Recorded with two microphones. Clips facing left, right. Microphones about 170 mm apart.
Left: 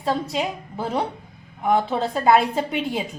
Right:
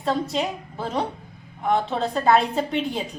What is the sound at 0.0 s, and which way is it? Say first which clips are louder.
A woman's voice: even; 5° left (ahead or behind).